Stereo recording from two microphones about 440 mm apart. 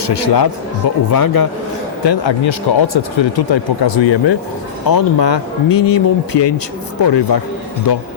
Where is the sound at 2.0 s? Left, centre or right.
Left.